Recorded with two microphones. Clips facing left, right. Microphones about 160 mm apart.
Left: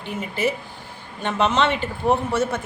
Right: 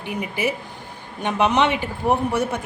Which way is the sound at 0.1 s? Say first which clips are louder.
Even; 15° right (ahead or behind).